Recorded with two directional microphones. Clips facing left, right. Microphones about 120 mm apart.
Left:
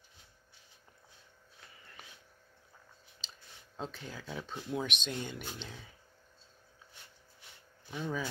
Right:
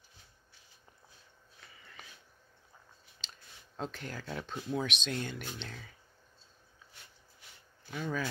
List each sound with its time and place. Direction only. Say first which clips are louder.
3.7 s speech: right 2 dB; centre (ahead or behind)
7.9 s speech: right 1 dB; 15° left (ahead or behind)